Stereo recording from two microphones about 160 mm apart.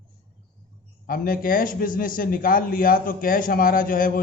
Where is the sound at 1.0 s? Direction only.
60° left (ahead or behind).